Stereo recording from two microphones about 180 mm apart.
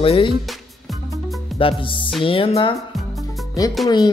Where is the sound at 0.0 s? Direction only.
30° left (ahead or behind).